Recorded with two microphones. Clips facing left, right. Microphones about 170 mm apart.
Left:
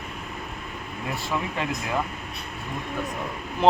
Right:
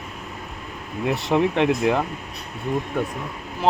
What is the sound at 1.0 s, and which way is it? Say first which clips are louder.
Speech: right 10 dB; 70° right (ahead or behind).